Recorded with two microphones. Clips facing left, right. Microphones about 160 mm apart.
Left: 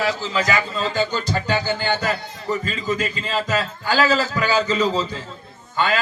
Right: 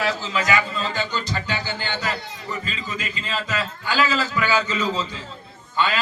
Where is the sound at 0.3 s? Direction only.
35° left (ahead or behind).